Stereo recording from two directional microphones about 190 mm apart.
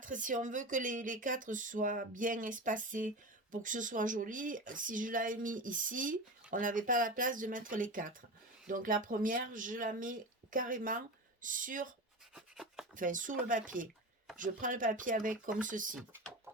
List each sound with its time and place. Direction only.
0.0 s speech: 40° right (ahead or behind)
12.3 s a sound: 5° right (ahead or behind)
13.0 s speech: 45° right (ahead or behind)